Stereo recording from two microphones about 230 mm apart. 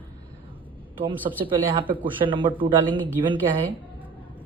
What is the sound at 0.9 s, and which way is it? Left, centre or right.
Speech, right.